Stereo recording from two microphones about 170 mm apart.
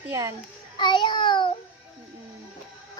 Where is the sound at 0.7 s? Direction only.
25° left (ahead or behind).